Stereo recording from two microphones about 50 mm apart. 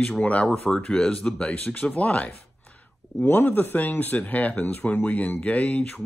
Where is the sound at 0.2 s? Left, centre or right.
Left.